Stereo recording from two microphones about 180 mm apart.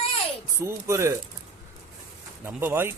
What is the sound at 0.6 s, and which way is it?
Speech, 15° right (ahead or behind).